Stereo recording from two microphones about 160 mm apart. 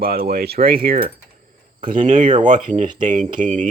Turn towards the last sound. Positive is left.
turn(degrees=-50)  # may be behind; listen again after turning